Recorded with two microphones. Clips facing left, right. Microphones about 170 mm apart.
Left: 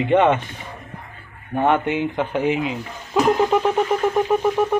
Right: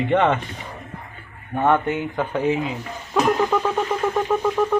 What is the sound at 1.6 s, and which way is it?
Speech, 15° left (ahead or behind).